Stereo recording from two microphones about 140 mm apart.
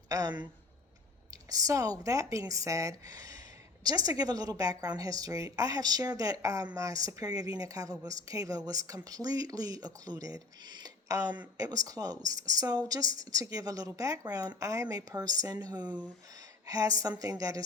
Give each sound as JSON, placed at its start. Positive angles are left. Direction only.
{"t": 0.1, "sound": "speech", "side_deg": -30}